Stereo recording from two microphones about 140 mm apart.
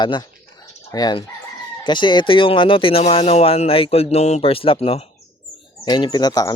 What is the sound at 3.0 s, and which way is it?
Speech, 50° left (ahead or behind).